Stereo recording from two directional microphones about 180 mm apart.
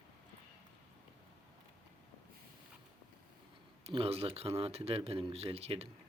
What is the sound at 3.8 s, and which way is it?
Speech, 35° right (ahead or behind).